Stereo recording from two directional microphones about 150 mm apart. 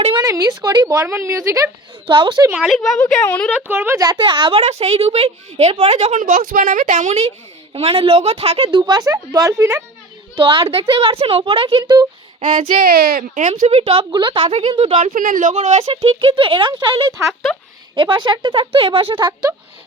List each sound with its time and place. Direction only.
0.0 s a child's voice: 35° right (ahead or behind)
0.3 s a woman's voice: 20° right (ahead or behind)
2.0 s a child's voice: 30° right (ahead or behind)
2.5 s a woman's voice: centre (ahead or behind)
3.5 s a woman's voice: 15° right (ahead or behind); by 4.6 s 35° right (ahead or behind)
4.6 s a woman's voice: 45° right (ahead or behind)
6.1 s a child's voice: 60° right (ahead or behind); by 9.8 s 20° right (ahead or behind)
10.3 s a child's voice: 35° right (ahead or behind)
12.7 s a woman's voice: 75° right (ahead or behind); by 19.5 s 25° right (ahead or behind)